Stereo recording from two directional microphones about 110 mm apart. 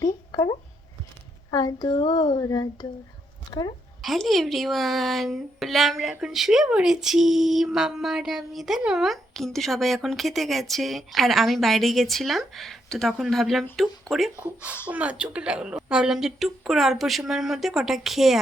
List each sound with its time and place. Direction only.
0.0 s a sound: 35° left (ahead or behind)
1.5 s speech: 35° left (ahead or behind)
4.0 s a woman's voice: centre (ahead or behind)
14.3 s a woman's voice: 15° right (ahead or behind)